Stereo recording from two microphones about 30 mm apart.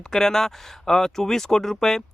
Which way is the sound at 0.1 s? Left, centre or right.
Centre.